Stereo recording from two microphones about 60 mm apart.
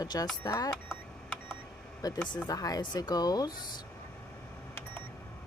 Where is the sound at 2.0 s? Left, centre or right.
Left.